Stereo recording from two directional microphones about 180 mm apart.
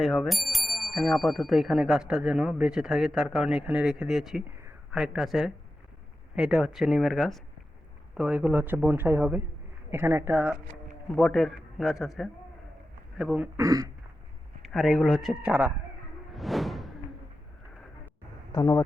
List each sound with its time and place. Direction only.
0.0 s speech: centre (ahead or behind)
11.1 s speech: 5° left (ahead or behind)
13.6 s speech: 20° right (ahead or behind)
14.6 s speech: centre (ahead or behind)
16.3 s music: centre (ahead or behind)
18.5 s speech: 15° left (ahead or behind)